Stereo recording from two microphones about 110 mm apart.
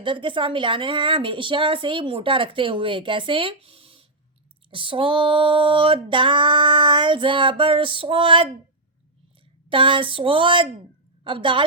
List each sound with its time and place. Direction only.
0.0 s a woman's voice: 50° right (ahead or behind)
9.6 s a woman's voice: 50° right (ahead or behind)